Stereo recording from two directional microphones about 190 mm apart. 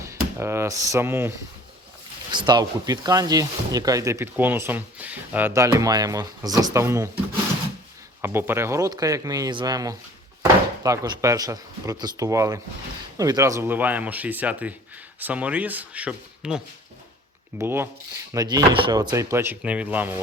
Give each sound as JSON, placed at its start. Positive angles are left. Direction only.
{"t": 0.0, "sound": "speech", "side_deg": -15}
{"t": 2.3, "sound": "speech", "side_deg": -25}
{"t": 8.2, "sound": "speech", "side_deg": -10}
{"t": 17.6, "sound": "speech", "side_deg": -10}